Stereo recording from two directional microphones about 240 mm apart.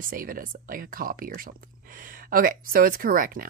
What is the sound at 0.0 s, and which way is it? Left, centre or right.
Speech, right.